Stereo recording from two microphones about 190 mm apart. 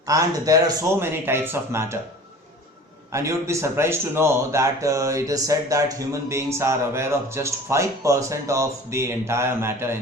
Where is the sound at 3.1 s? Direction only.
15° right (ahead or behind).